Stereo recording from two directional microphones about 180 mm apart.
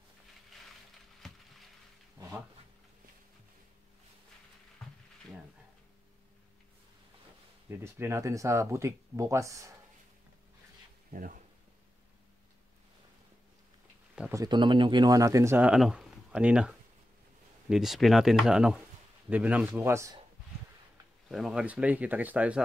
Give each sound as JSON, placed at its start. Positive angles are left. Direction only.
{"t": 1.2, "sound": "a sound", "side_deg": 0}
{"t": 7.7, "sound": "speech", "side_deg": -15}
{"t": 11.1, "sound": "speech", "side_deg": -50}
{"t": 14.3, "sound": "speech", "side_deg": -20}
{"t": 21.3, "sound": "speech", "side_deg": 0}